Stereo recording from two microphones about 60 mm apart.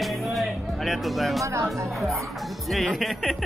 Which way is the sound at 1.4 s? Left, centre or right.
Right.